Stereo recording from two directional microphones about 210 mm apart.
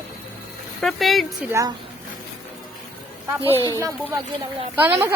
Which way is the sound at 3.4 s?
15° left (ahead or behind).